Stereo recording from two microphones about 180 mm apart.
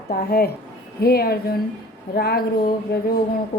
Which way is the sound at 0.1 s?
55° left (ahead or behind).